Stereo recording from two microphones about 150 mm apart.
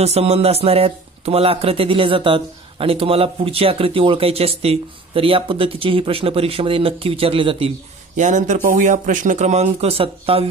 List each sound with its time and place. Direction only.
0.0 s speech: 45° right (ahead or behind)
8.2 s speech: 55° right (ahead or behind); by 10.5 s 40° right (ahead or behind)